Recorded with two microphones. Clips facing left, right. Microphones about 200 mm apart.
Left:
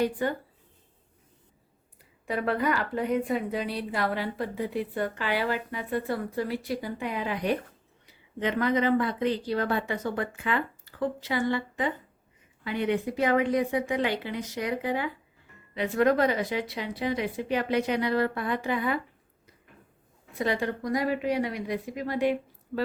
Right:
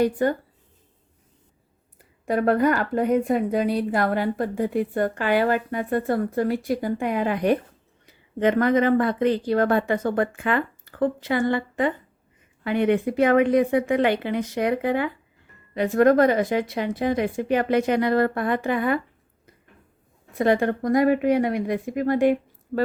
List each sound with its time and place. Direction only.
0.0 s a woman's voice: 45° right (ahead or behind)
2.2 s a woman's voice: 45° right (ahead or behind)
15.7 s a woman's voice: 45° right (ahead or behind)
20.4 s a woman's voice: 55° right (ahead or behind)